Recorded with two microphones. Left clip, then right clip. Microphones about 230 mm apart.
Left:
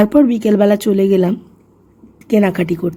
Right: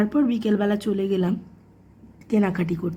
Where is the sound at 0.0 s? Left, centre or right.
Centre.